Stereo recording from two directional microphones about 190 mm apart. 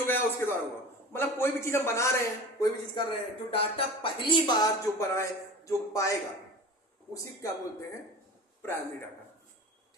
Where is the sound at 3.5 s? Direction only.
30° left (ahead or behind).